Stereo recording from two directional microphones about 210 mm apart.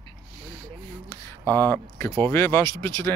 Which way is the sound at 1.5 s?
10° left (ahead or behind).